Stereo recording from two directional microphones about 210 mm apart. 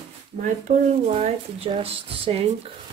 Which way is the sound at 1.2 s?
25° right (ahead or behind).